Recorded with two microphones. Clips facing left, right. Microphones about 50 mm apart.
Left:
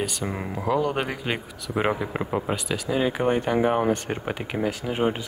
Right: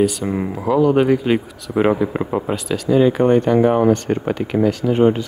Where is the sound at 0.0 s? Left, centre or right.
Centre.